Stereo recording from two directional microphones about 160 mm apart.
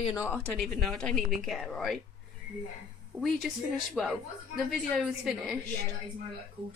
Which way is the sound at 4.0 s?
Centre (ahead or behind).